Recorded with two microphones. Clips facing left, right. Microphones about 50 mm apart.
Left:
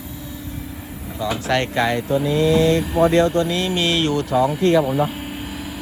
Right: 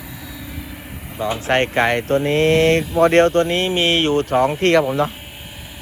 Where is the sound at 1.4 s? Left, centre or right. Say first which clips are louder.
Right 3 dB; right.